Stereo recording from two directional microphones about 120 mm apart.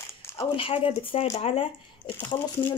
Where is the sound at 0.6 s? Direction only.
50° left (ahead or behind).